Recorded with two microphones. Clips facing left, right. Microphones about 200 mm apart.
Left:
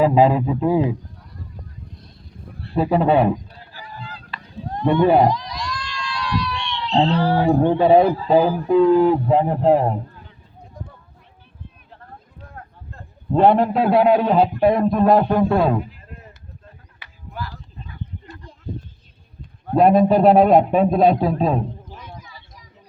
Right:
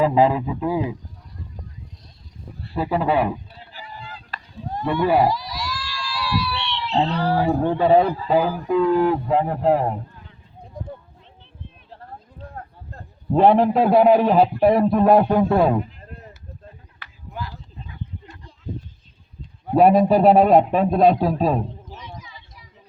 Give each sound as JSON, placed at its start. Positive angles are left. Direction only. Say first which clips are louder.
{"t": 0.0, "sound": "speech", "louder": "left 2 dB", "side_deg": 15}
{"t": 2.7, "sound": "speech", "louder": "left 4 dB", "side_deg": 25}
{"t": 3.7, "sound": "fowl", "louder": "left 1 dB", "side_deg": -15}
{"t": 4.9, "sound": "speech", "louder": "left 4 dB", "side_deg": 25}
{"t": 5.2, "sound": "a sound", "louder": "left 2 dB", "side_deg": -5}
{"t": 7.2, "sound": "a man's voice", "louder": "left 2 dB", "side_deg": 0}
{"t": 7.7, "sound": "a man's voice", "louder": "left 2 dB", "side_deg": 15}
{"t": 13.3, "sound": "a man's voice", "louder": "even", "side_deg": -5}
{"t": 17.3, "sound": "a sound", "louder": "left 1 dB", "side_deg": -15}
{"t": 19.6, "sound": "a man's voice", "louder": "even", "side_deg": -5}